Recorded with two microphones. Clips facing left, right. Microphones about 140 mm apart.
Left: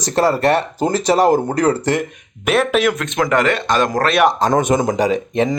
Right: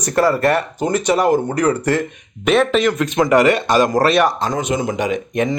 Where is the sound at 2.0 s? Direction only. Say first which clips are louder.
Right 1 dB; 5° left (ahead or behind).